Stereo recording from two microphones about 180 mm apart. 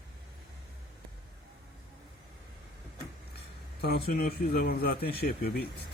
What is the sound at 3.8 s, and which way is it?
Speech, 60° left (ahead or behind).